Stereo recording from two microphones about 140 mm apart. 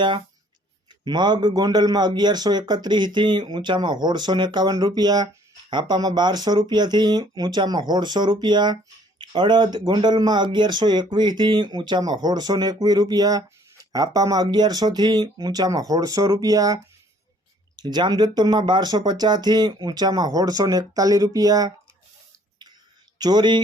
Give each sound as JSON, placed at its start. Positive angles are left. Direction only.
{"t": 1.0, "sound": "speech", "side_deg": -30}
{"t": 23.1, "sound": "speech", "side_deg": -30}